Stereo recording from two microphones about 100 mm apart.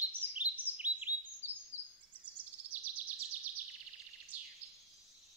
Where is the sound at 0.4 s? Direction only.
15° right (ahead or behind).